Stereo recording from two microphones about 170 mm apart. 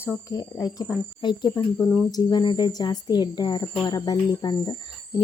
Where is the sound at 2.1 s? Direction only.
25° left (ahead or behind).